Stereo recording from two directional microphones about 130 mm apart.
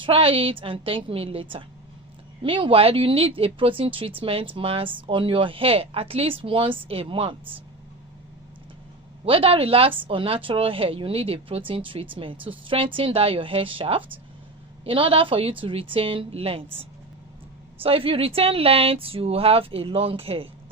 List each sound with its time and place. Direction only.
0.0 s speech: 45° right (ahead or behind)
9.2 s speech: 45° right (ahead or behind)
17.8 s speech: 45° right (ahead or behind)